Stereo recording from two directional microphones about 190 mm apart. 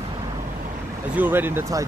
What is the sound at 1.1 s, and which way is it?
Speech, 10° right (ahead or behind).